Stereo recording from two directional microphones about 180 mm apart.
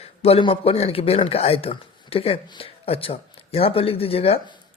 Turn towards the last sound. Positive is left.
turn(degrees=35)  # may be behind; listen again after turning